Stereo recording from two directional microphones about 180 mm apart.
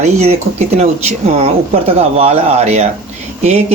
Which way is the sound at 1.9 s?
35° right (ahead or behind).